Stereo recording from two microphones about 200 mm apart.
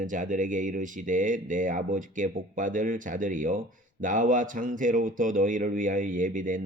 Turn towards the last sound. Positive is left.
turn(degrees=-40)  # may be behind; listen again after turning